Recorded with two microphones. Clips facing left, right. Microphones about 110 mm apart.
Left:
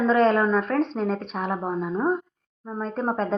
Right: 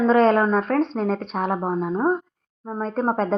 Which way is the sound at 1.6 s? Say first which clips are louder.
Right 3 dB; 25° right (ahead or behind).